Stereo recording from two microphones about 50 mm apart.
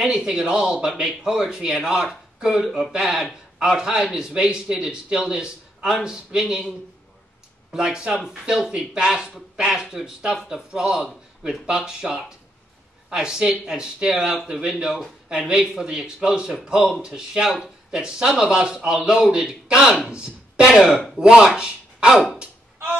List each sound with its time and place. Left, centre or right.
0.0 s speech: centre
3.1 s speech: centre
3.5 s speech: centre
7.7 s speech: centre
8.1 s speech: centre
20.6 s speech: centre